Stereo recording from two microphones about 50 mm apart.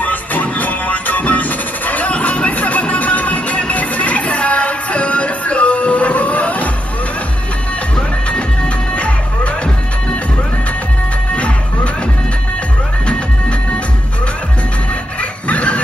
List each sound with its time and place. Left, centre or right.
0.0 s music: left
8.9 s music: left
11.3 s music: left
15.4 s snicker: left